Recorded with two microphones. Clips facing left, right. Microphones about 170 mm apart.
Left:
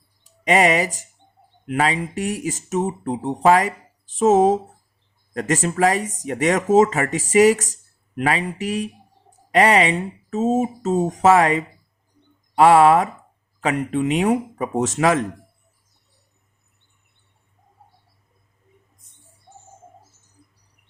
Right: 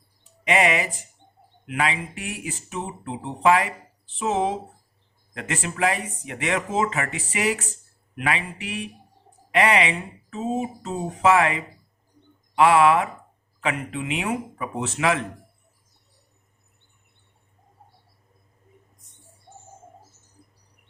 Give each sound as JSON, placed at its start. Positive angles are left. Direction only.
{"t": 0.4, "sound": "speech", "side_deg": 40}